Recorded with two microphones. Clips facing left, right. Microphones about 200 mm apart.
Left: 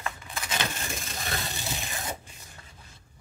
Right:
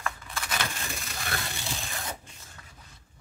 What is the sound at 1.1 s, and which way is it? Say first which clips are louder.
Rub: right 1 dB; 20° left (ahead or behind).